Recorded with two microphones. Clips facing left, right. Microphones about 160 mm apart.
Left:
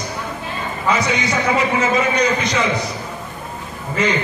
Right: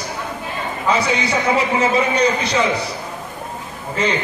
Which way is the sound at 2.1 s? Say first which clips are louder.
Right 1 dB; 30° right (ahead or behind).